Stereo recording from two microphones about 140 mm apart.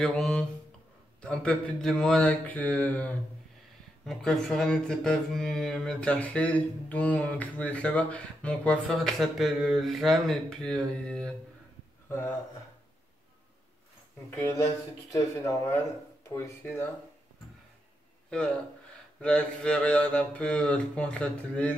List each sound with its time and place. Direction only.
0.0 s speech: 5° left (ahead or behind)
1.2 s mantra: 5° left (ahead or behind)
4.0 s speech: 5° left (ahead or behind)
12.1 s mantra: 15° left (ahead or behind)
14.4 s speech: 20° left (ahead or behind)
16.3 s mantra: 15° left (ahead or behind)
18.3 s mantra: 10° left (ahead or behind)